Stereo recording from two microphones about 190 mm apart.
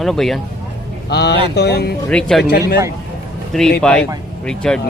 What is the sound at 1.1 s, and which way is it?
Speech, 60° left (ahead or behind).